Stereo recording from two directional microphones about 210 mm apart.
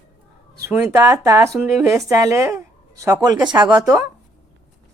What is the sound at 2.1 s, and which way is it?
A woman's voice, 15° right (ahead or behind).